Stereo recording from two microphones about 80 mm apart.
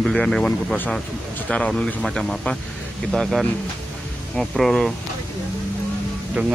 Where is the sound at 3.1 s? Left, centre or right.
Centre.